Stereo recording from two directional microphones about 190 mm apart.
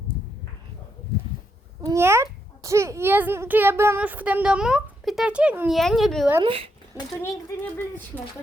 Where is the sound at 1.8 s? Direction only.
15° right (ahead or behind).